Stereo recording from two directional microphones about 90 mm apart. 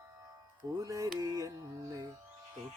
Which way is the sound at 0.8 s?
40° right (ahead or behind).